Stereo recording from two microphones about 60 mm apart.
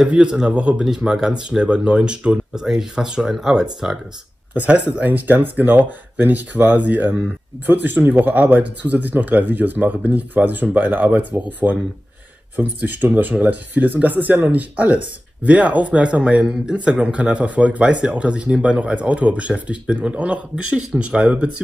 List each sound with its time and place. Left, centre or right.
0.0 s speech: centre
4.6 s speech: right